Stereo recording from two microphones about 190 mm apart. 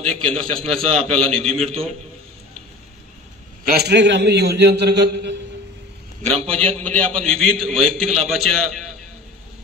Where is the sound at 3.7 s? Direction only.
60° right (ahead or behind).